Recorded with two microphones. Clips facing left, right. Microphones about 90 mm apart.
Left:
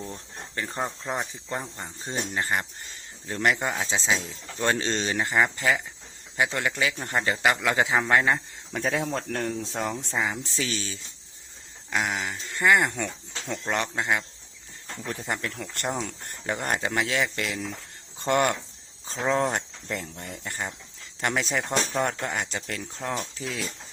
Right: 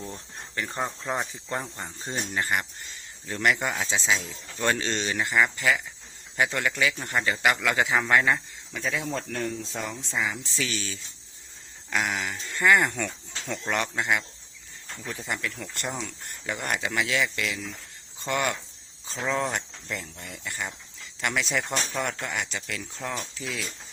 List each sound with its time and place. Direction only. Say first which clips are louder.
0.7 s speech: even; 15° left (ahead or behind)
1.0 s speech: right 1 dB; 5° left (ahead or behind)
2.0 s speech: even; 25° left (ahead or behind)
8.7 s speech: left 4 dB; 50° left (ahead or behind)
9.1 s speech: left 2 dB; 60° left (ahead or behind)
10.2 s speech: right 1 dB; 25° left (ahead or behind)
11.9 s speech: even; 20° left (ahead or behind)
15.3 s speech: even; 40° left (ahead or behind)
19.0 s speech: left 3 dB; 30° left (ahead or behind)